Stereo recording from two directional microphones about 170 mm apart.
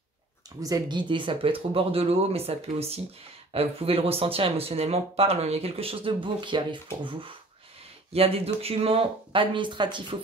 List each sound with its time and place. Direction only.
0.6 s speech: 20° right (ahead or behind)